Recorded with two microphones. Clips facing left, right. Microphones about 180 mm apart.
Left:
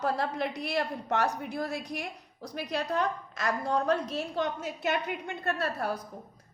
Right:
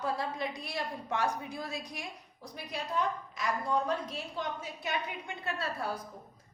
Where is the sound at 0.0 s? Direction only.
70° left (ahead or behind).